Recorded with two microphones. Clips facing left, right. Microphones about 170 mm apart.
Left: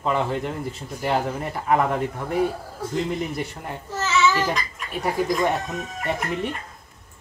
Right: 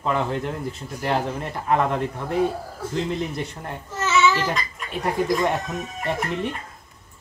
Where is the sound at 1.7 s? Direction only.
10° left (ahead or behind).